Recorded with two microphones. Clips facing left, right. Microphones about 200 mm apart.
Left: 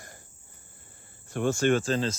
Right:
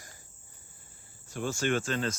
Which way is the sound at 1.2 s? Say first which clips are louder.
Left 6 dB; 55° left (ahead or behind).